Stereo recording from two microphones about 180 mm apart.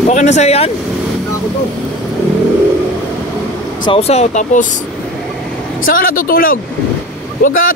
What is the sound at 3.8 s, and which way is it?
Speech, 30° left (ahead or behind).